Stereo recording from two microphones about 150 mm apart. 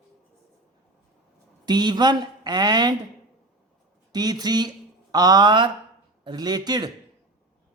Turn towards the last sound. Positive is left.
turn(degrees=-25)  # may be behind; listen again after turning